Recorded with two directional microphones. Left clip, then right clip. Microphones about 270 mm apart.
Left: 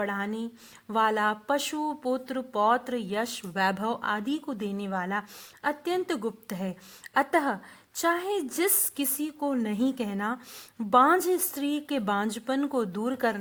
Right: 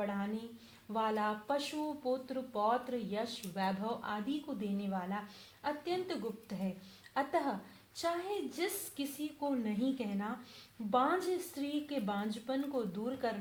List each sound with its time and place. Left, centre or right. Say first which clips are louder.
0.0 s a woman's voice: left 8 dB; left